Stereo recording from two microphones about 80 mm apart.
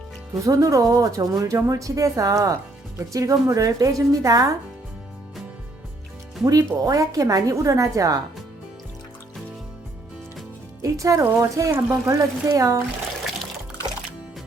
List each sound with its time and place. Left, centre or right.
0.4 s speech: right
6.4 s speech: right
10.8 s speech: right